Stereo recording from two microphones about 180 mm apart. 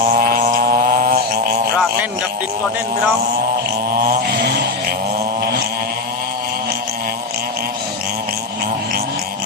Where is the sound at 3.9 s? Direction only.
55° right (ahead or behind).